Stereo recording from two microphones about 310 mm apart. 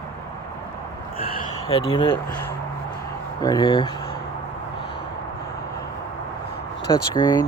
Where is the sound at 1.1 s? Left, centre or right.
Left.